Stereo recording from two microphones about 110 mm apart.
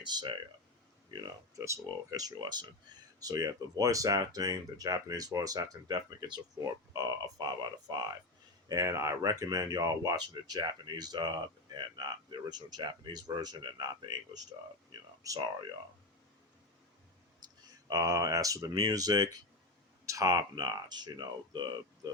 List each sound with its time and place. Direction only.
0.0 s speech: 45° right (ahead or behind)
1.5 s speech: 30° right (ahead or behind)
15.2 s speech: 30° right (ahead or behind)
17.4 s a sound: 40° right (ahead or behind)
17.8 s speech: 30° right (ahead or behind)